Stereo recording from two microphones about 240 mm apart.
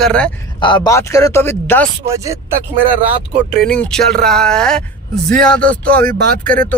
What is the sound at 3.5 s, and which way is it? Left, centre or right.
Speech, centre.